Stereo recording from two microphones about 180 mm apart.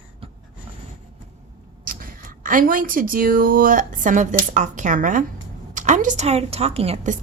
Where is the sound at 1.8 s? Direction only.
50° right (ahead or behind).